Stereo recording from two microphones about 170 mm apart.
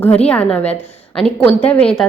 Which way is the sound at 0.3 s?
5° left (ahead or behind).